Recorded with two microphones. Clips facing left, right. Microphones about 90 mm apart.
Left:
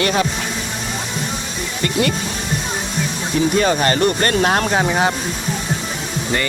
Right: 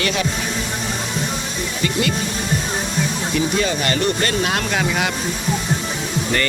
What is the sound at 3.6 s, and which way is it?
Speech, 45° left (ahead or behind).